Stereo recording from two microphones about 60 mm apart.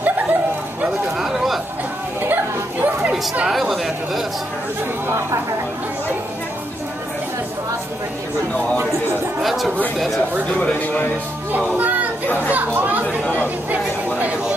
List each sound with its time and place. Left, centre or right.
0.0 s a sound: right
1.1 s chatter: centre
2.2 s a sound: right
3.4 s speech: centre
5.0 s speech: right
9.4 s speech: centre
10.6 s speech: left
11.6 s speech: right
13.2 s speech: left
13.7 s speech: right